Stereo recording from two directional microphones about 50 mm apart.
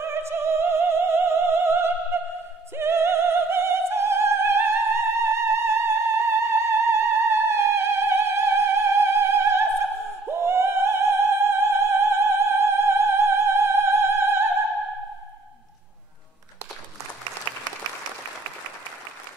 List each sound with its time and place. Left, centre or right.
0.0 s opera: right